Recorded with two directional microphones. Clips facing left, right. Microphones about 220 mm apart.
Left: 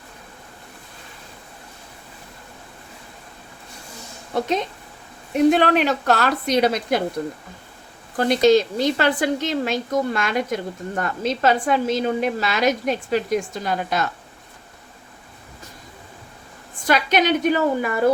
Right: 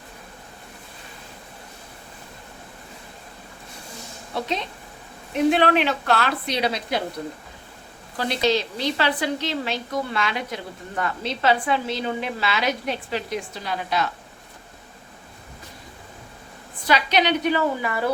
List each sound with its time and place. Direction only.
5.5 s speech: 45° left (ahead or behind)
8.1 s speech: 50° left (ahead or behind)
16.8 s speech: 45° left (ahead or behind)